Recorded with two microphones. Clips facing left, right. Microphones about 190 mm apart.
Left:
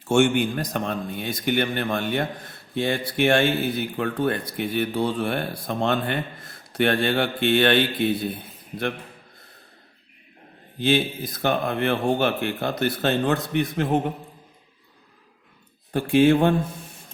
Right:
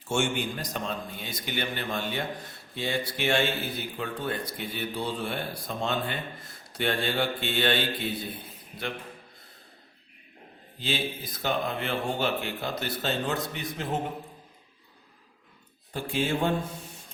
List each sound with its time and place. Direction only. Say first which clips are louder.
0.1 s speech: left 9 dB; 60° left (ahead or behind)
10.8 s speech: left 10 dB; 55° left (ahead or behind)
15.9 s speech: left 12 dB; 60° left (ahead or behind)